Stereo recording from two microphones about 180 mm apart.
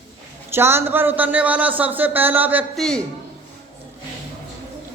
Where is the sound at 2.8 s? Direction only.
5° left (ahead or behind).